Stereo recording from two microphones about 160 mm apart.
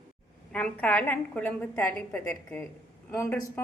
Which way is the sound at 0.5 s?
10° left (ahead or behind).